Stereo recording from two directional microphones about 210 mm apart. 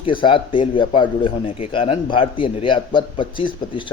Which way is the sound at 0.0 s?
25° left (ahead or behind).